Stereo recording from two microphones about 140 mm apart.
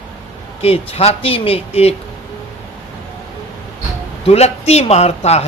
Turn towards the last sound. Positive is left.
turn(degrees=50)  # may be behind; listen again after turning